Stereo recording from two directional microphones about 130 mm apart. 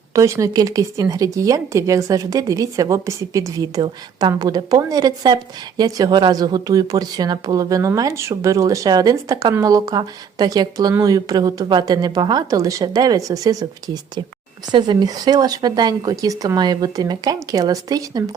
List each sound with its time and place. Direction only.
0.1 s speech: 25° right (ahead or behind)